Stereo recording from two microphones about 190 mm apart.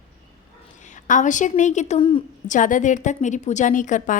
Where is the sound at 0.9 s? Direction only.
40° left (ahead or behind).